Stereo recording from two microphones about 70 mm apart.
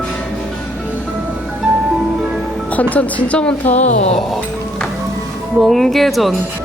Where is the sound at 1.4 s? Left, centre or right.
Centre.